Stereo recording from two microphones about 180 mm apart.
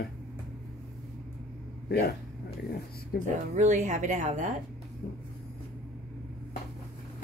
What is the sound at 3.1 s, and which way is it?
Speech, 55° left (ahead or behind).